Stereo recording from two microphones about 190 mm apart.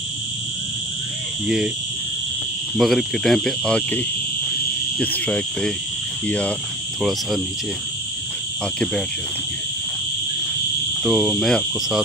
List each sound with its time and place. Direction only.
2.8 s cricket: centre (ahead or behind)
4.9 s speech: 5° left (ahead or behind)
7.0 s cricket: centre (ahead or behind)
11.1 s cricket: centre (ahead or behind)